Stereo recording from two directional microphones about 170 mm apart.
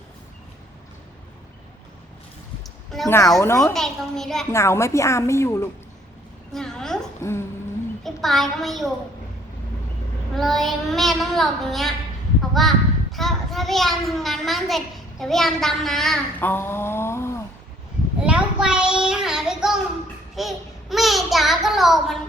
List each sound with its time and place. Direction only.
3.1 s a woman's voice: 15° left (ahead or behind)
3.6 s a child's voice: centre (ahead or behind)
4.5 s a woman's voice: 15° left (ahead or behind)
6.5 s a sound: 5° left (ahead or behind)
7.2 s a woman's voice: 15° left (ahead or behind)
8.0 s a child's voice: centre (ahead or behind)
10.3 s a child's voice: centre (ahead or behind)
18.2 s child singing: 5° right (ahead or behind)
20.3 s a child's voice: centre (ahead or behind)